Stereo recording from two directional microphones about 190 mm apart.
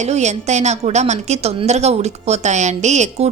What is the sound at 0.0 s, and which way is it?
A woman's voice, 35° right (ahead or behind).